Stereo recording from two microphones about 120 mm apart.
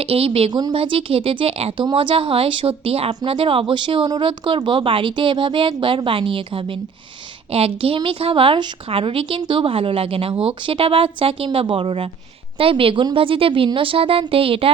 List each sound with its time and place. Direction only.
0.0 s speech: 55° right (ahead or behind)
0.5 s a woman's voice: 35° right (ahead or behind)
0.8 s speech: 50° right (ahead or behind)